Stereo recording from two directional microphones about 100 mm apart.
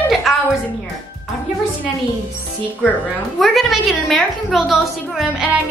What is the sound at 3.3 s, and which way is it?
A woman's voice, centre (ahead or behind).